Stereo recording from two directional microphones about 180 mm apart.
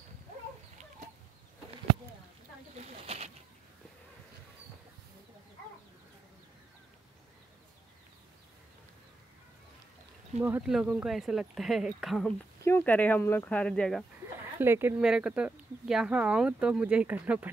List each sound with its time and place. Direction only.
2.7 s bird: 40° right (ahead or behind)
10.4 s speech: 5° right (ahead or behind)
12.6 s speech: 10° left (ahead or behind)
14.6 s speech: 10° right (ahead or behind)